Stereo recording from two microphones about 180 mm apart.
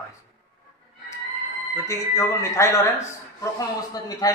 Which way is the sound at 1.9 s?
15° left (ahead or behind).